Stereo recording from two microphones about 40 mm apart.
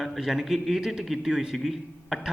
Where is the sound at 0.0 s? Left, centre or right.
Centre.